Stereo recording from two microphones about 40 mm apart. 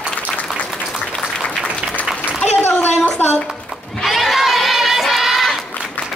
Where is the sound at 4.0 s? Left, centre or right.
Centre.